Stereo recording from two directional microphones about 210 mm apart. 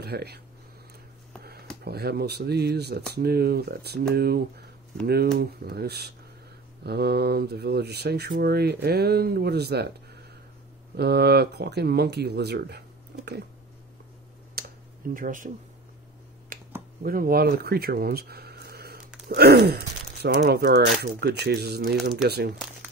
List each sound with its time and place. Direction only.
0.0 s speech: 50° right (ahead or behind)
1.9 s speech: 50° right (ahead or behind)
11.0 s speech: 50° right (ahead or behind)
14.6 s computer keyboard: 45° right (ahead or behind)
15.1 s speech: 40° right (ahead or behind)
16.5 s a sound: 40° right (ahead or behind)
17.0 s speech: 45° right (ahead or behind)